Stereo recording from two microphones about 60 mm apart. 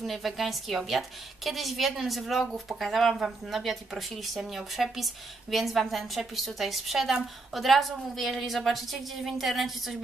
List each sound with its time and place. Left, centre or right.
0.0 s speech: centre